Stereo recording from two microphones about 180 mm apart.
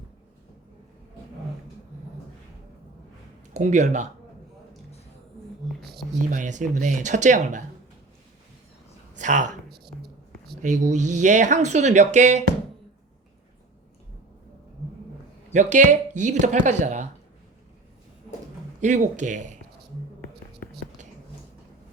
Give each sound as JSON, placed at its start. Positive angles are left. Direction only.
{"t": 3.5, "sound": "speech", "side_deg": -40}
{"t": 5.8, "sound": "a sound", "side_deg": 0}
{"t": 6.3, "sound": "speech", "side_deg": -45}
{"t": 9.1, "sound": "speech", "side_deg": -45}
{"t": 10.6, "sound": "speech", "side_deg": -45}
{"t": 15.5, "sound": "speech", "side_deg": -45}
{"t": 18.8, "sound": "speech", "side_deg": -45}